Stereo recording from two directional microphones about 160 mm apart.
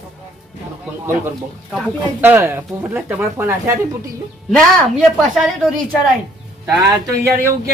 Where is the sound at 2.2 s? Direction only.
15° right (ahead or behind).